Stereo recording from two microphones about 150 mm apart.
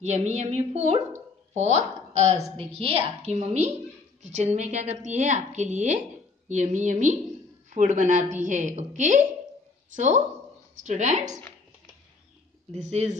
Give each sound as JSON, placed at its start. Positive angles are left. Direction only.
{"t": 0.0, "sound": "a woman's voice", "side_deg": -50}
{"t": 12.7, "sound": "a woman's voice", "side_deg": -50}